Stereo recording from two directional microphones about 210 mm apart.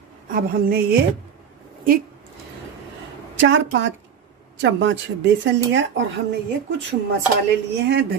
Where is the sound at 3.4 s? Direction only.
60° right (ahead or behind).